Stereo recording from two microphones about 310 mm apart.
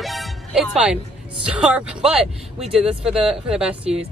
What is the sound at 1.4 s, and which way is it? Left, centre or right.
A woman's voice, centre.